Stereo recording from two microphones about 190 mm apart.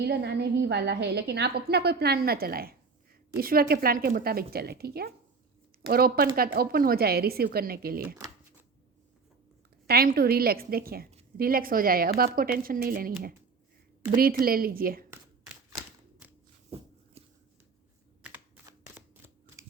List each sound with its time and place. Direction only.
0.0 s a woman's voice: 65° right (ahead or behind)
9.8 s a woman's voice: 55° right (ahead or behind)
18.2 s computer keyboard: 10° right (ahead or behind)